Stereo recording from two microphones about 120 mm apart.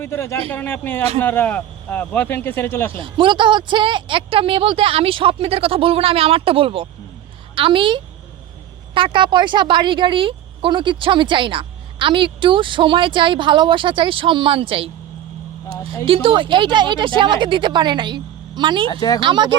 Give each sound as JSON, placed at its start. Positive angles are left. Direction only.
{"t": 0.0, "sound": "speech", "side_deg": 20}
{"t": 3.0, "sound": "speech", "side_deg": -45}
{"t": 16.0, "sound": "speech", "side_deg": -50}
{"t": 18.9, "sound": "speech", "side_deg": 35}
{"t": 19.2, "sound": "speech", "side_deg": -40}